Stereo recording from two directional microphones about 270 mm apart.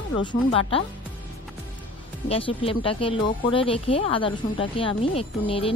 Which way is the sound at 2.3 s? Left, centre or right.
Left.